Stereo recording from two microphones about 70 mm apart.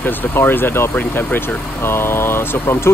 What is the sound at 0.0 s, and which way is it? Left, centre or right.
Speech, left.